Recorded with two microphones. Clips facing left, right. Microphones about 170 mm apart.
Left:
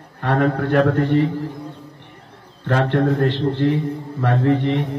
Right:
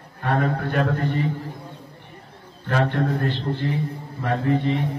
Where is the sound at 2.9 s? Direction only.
70° left (ahead or behind).